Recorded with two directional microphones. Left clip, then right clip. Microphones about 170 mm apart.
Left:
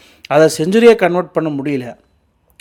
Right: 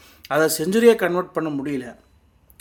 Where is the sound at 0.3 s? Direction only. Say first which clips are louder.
Left 8 dB; 40° left (ahead or behind).